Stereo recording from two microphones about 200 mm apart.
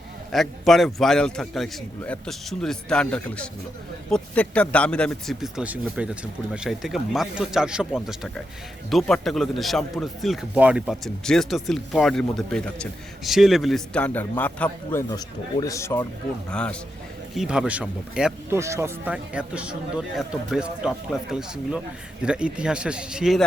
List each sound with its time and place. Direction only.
0.3 s speech: centre (ahead or behind)